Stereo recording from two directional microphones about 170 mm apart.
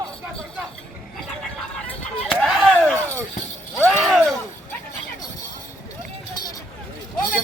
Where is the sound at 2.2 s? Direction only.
Centre (ahead or behind).